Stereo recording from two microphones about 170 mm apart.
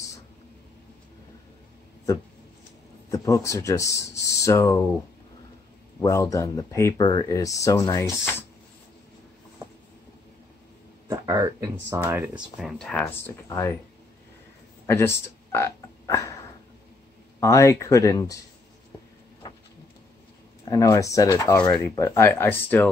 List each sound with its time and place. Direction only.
3.1 s speech: 20° left (ahead or behind)
5.9 s speech: 20° left (ahead or behind)
11.1 s a sound: 20° right (ahead or behind)
12.0 s speech: 10° right (ahead or behind)
12.5 s speech: centre (ahead or behind)
14.9 s speech: 15° left (ahead or behind)
17.4 s speech: 15° left (ahead or behind)
20.6 s speech: 20° left (ahead or behind)